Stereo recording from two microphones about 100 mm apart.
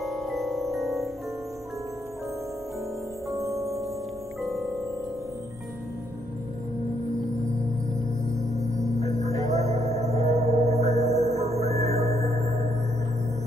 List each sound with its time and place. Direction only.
0.0 s music: centre (ahead or behind)
3.3 s music: 30° right (ahead or behind)
4.4 s music: centre (ahead or behind)
8.4 s music: 35° right (ahead or behind)
9.0 s music: 90° right
11.1 s music: 30° right (ahead or behind)
11.3 s music: 90° right
11.9 s gong: 30° left (ahead or behind)